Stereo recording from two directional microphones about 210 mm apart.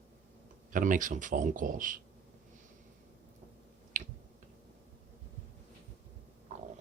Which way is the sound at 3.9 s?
40° right (ahead or behind).